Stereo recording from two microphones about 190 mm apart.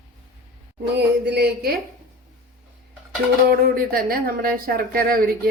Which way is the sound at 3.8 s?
50° right (ahead or behind).